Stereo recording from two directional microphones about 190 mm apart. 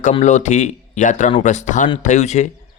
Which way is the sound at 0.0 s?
40° left (ahead or behind).